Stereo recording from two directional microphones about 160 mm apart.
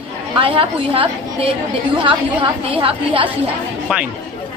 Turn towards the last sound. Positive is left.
turn(degrees=-5)  # may be behind; listen again after turning